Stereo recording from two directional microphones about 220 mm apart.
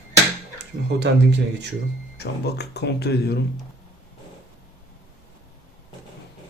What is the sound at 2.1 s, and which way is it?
Speech, 50° left (ahead or behind).